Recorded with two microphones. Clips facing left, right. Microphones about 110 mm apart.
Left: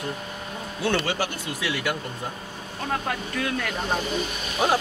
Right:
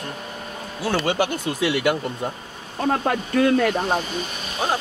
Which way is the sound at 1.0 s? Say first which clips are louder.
Right 6 dB; 20° right (ahead or behind).